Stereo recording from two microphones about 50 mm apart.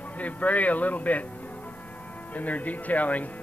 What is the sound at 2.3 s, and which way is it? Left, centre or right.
Speech, left.